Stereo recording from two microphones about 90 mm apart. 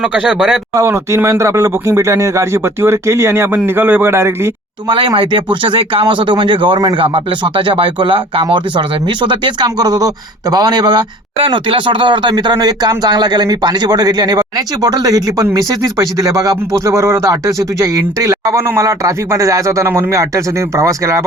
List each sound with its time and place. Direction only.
0.0 s speech: 10° right (ahead or behind)
0.8 s a man's voice: 30° right (ahead or behind)
4.9 s speech: 65° right (ahead or behind)
9.6 s speech: 50° right (ahead or behind)
11.3 s speech: 75° right (ahead or behind); by 21.2 s 35° right (ahead or behind)